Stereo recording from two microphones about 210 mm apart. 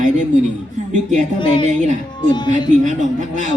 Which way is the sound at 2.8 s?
35° right (ahead or behind).